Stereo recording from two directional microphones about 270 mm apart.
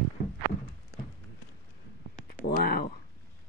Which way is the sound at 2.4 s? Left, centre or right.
Left.